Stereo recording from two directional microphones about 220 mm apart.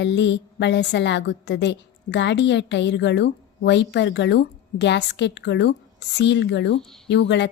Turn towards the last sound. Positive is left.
turn(degrees=55)  # may be behind; listen again after turning